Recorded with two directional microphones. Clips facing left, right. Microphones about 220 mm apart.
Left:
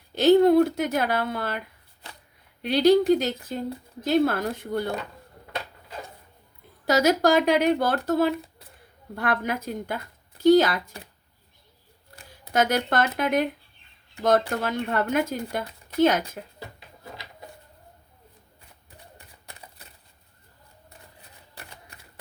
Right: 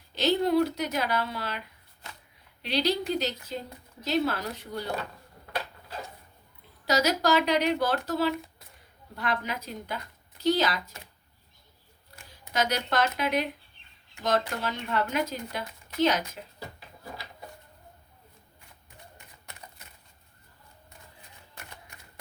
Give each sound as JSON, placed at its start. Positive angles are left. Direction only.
{"t": 0.1, "sound": "speech", "side_deg": 50}
{"t": 6.8, "sound": "speech", "side_deg": 50}
{"t": 12.5, "sound": "speech", "side_deg": 50}
{"t": 19.1, "sound": "a sound", "side_deg": 35}
{"t": 21.5, "sound": "typewriter", "side_deg": 35}